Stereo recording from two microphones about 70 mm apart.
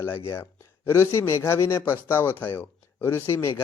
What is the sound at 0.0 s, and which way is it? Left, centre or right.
Speech, left.